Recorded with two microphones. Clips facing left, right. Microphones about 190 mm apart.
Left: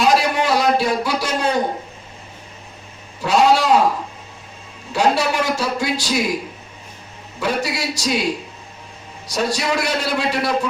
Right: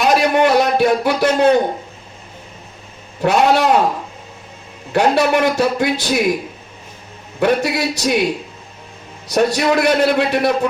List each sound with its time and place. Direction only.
0.0 s a man's voice: 60° right (ahead or behind)
3.2 s a man's voice: 60° right (ahead or behind)
4.9 s a man's voice: 60° right (ahead or behind)
7.3 s a man's voice: 60° right (ahead or behind)
9.3 s a man's voice: 60° right (ahead or behind)